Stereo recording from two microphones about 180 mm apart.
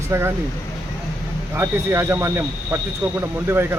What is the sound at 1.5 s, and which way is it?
Speech, 15° right (ahead or behind).